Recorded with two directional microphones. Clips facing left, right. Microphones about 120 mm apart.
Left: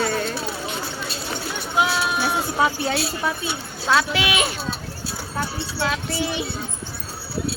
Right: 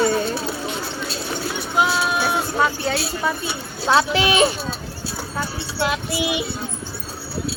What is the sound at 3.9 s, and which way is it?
Speech, 30° right (ahead or behind).